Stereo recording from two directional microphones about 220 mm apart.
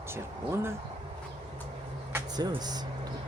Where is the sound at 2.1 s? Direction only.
20° right (ahead or behind).